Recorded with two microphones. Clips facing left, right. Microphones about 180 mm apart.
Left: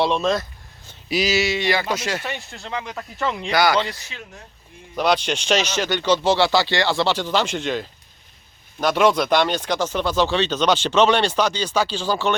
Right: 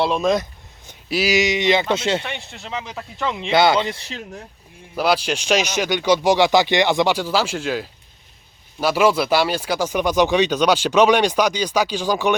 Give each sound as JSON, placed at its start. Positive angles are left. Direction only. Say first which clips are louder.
{"t": 0.0, "sound": "speech", "louder": "right 1 dB", "side_deg": -10}
{"t": 1.0, "sound": "speech", "louder": "right 1 dB", "side_deg": 0}
{"t": 1.3, "sound": "speech", "louder": "right 5 dB", "side_deg": -15}
{"t": 2.2, "sound": "speech", "louder": "left 1 dB", "side_deg": 0}
{"t": 3.5, "sound": "speech", "louder": "right 3 dB", "side_deg": -25}
{"t": 4.9, "sound": "speech", "louder": "right 1 dB", "side_deg": -5}